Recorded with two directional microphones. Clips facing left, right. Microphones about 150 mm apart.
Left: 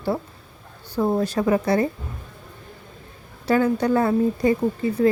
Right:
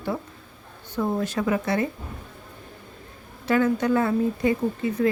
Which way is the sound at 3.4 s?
35° left (ahead or behind).